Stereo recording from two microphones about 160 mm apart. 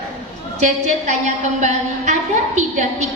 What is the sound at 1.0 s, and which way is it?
A woman's voice, 45° right (ahead or behind).